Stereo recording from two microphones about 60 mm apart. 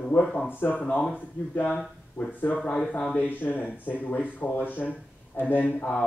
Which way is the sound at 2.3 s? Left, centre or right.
Left.